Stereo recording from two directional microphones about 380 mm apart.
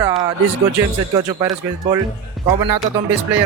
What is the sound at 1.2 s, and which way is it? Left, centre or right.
Speech, centre.